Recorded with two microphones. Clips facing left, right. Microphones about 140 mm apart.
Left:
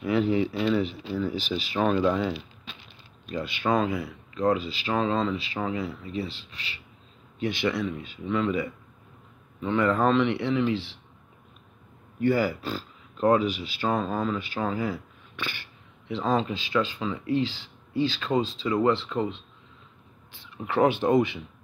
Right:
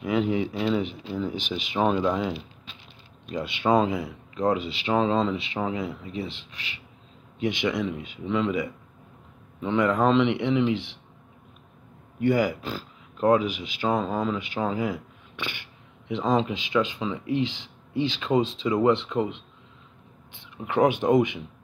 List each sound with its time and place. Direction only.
0.0 s speech: 15° right (ahead or behind)
12.2 s speech: 15° right (ahead or behind)
20.6 s speech: 15° right (ahead or behind)